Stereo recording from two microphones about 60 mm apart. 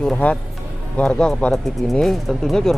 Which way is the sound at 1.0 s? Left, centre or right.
Centre.